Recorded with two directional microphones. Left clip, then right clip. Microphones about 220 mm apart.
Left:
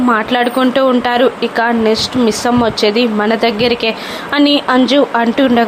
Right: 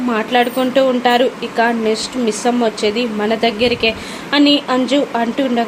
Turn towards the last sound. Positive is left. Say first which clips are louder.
# left 5 dB
turn(degrees=15)  # may be behind; listen again after turning